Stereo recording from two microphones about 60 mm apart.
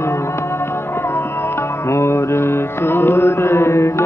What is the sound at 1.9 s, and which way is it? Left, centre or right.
Music, left.